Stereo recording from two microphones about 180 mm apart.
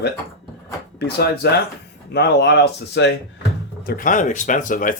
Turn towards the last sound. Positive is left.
turn(degrees=50)  # may be behind; listen again after turning